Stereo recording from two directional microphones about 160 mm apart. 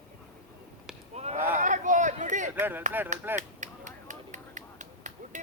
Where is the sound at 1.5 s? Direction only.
55° right (ahead or behind).